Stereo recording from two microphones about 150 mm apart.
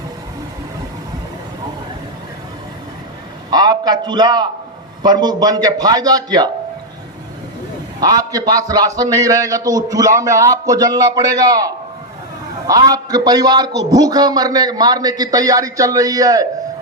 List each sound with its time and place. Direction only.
3.5 s a man's voice: 25° right (ahead or behind)
8.0 s a man's voice: 25° right (ahead or behind)